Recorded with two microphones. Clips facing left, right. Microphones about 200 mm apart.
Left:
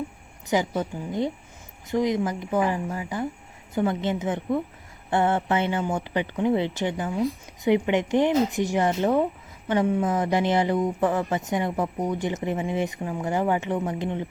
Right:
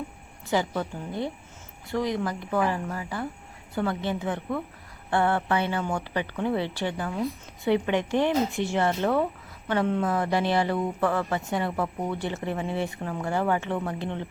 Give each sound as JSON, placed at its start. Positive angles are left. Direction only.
{"t": 0.5, "sound": "a woman's voice", "side_deg": 20}